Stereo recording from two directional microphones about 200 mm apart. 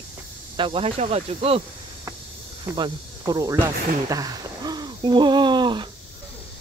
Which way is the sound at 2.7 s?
20° right (ahead or behind).